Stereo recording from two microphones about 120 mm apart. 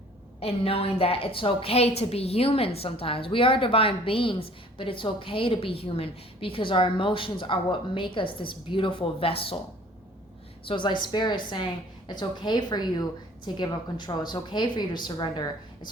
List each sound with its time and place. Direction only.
0.3 s a woman's voice: 55° left (ahead or behind)
10.7 s speech: 40° left (ahead or behind)